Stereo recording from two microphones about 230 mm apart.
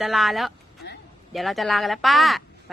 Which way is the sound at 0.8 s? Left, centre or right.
Left.